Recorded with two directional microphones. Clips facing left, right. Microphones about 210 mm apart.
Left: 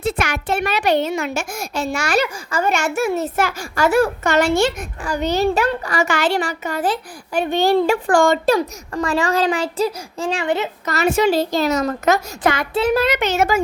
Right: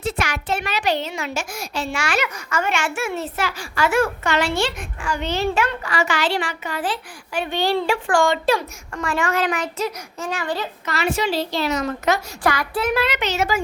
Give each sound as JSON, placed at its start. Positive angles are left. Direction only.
{"t": 0.2, "sound": "a child's voice", "side_deg": 55}
{"t": 10.8, "sound": "a woman's voice", "side_deg": 45}
{"t": 12.4, "sound": "speech", "side_deg": 25}
{"t": 12.9, "sound": "a woman's voice", "side_deg": 45}